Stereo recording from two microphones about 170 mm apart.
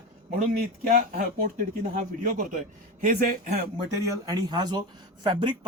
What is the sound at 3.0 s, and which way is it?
Speech, 55° right (ahead or behind).